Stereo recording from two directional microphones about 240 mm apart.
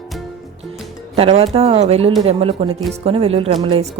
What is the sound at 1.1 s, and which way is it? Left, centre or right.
A woman's voice, right.